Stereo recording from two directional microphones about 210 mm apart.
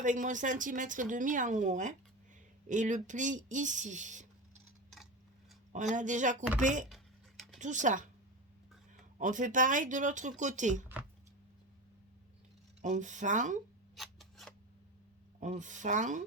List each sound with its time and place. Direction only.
0.0 s speech: 35° right (ahead or behind)
5.7 s speech: 35° right (ahead or behind)
6.8 s a sound: centre (ahead or behind)
7.6 s speech: 35° right (ahead or behind)
9.1 s speech: 35° right (ahead or behind)
12.8 s speech: 35° right (ahead or behind)
13.9 s scissors: centre (ahead or behind)
15.4 s speech: 35° right (ahead or behind)